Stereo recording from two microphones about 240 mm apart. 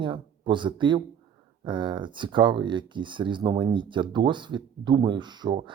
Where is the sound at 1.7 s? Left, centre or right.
Centre.